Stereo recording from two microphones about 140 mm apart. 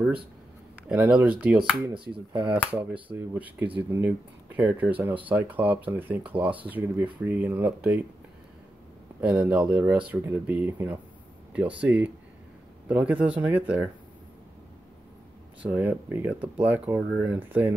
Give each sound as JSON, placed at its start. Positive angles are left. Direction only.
{"t": 0.8, "sound": "speech", "side_deg": -10}
{"t": 2.0, "sound": "speech", "side_deg": -35}
{"t": 2.4, "sound": "speech", "side_deg": -10}
{"t": 9.2, "sound": "speech", "side_deg": -10}
{"t": 15.7, "sound": "speech", "side_deg": -15}